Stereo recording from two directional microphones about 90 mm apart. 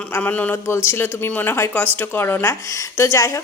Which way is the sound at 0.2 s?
20° left (ahead or behind).